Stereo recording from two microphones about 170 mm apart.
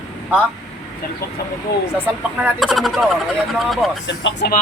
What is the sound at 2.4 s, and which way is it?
Speech, centre (ahead or behind).